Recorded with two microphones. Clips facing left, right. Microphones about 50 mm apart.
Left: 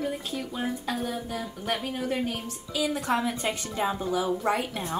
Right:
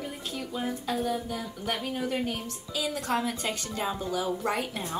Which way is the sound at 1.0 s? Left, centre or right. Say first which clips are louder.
Right 1 dB; centre.